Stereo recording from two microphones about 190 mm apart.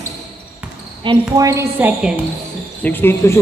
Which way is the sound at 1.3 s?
15° right (ahead or behind).